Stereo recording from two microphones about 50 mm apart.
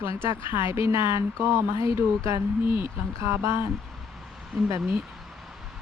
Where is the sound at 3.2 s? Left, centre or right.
Right.